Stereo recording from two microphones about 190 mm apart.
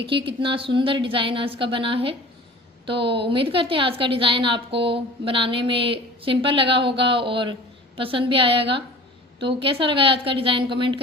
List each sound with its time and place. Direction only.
0.1 s a woman's voice: 25° right (ahead or behind)